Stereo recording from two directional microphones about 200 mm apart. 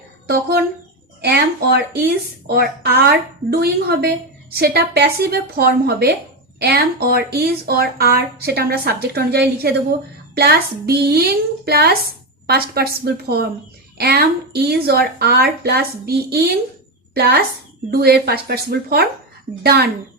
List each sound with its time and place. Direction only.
0.3 s speech: 50° right (ahead or behind)